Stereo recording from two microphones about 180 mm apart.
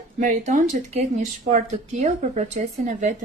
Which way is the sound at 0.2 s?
45° right (ahead or behind).